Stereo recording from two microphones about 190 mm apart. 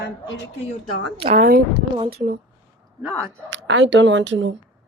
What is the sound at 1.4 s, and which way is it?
Speech, 50° right (ahead or behind).